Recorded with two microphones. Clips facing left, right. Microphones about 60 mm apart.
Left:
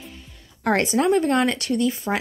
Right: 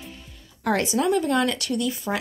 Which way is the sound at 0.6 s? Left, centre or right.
Left.